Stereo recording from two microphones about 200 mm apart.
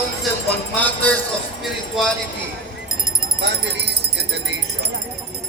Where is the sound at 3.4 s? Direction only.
60° right (ahead or behind).